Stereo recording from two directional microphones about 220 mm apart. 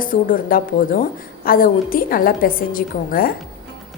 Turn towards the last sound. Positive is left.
turn(degrees=40)  # may be behind; listen again after turning